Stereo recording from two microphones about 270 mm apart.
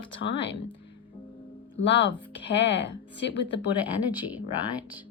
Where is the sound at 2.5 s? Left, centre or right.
Left.